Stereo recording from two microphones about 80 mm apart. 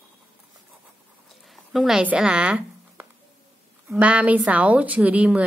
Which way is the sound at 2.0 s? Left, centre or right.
Centre.